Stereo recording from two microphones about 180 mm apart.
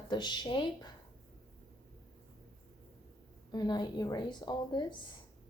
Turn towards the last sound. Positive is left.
turn(degrees=25)  # may be behind; listen again after turning